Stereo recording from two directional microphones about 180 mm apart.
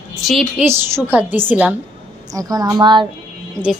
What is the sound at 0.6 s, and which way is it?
Speech, 15° right (ahead or behind).